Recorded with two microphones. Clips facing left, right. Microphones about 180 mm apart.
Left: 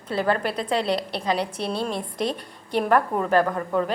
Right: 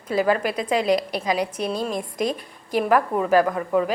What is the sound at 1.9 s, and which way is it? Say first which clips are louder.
Speech: right 2 dB; 30° left (ahead or behind).